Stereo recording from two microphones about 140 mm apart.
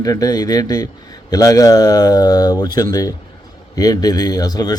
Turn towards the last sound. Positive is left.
turn(degrees=30)  # may be behind; listen again after turning